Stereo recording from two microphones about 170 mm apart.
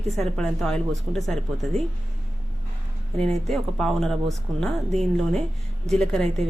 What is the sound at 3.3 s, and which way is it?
A woman's voice, centre (ahead or behind).